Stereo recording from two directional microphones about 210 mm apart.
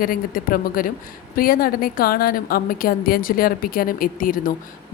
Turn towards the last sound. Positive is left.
turn(degrees=40)  # may be behind; listen again after turning